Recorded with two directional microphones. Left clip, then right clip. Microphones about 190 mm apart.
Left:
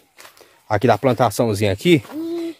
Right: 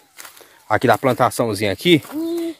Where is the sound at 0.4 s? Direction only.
5° left (ahead or behind).